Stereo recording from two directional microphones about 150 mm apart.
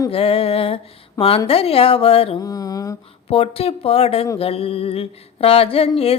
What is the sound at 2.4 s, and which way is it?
Mantra, 25° left (ahead or behind).